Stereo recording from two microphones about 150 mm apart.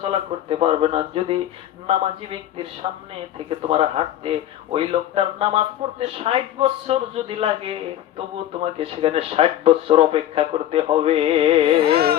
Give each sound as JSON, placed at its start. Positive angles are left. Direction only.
{"t": 0.0, "sound": "speech", "side_deg": -40}
{"t": 3.3, "sound": "speech", "side_deg": -40}
{"t": 8.8, "sound": "speech", "side_deg": -40}
{"t": 11.8, "sound": "carnatic music", "side_deg": -90}